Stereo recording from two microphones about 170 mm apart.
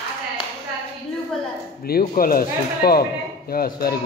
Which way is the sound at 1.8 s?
60° left (ahead or behind).